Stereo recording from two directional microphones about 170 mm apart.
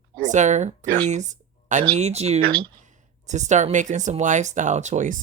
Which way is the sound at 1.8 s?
35° right (ahead or behind).